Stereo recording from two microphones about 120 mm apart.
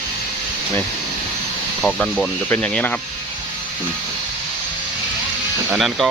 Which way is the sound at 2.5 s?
10° left (ahead or behind).